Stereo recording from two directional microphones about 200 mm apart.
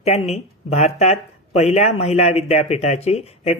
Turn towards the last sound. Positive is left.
turn(degrees=30)  # may be behind; listen again after turning